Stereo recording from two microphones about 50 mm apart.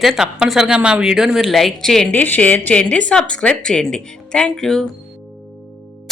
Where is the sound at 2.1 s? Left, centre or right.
Left; by 4.8 s centre.